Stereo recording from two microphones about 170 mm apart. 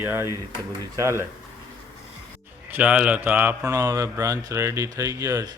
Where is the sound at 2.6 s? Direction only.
10° right (ahead or behind).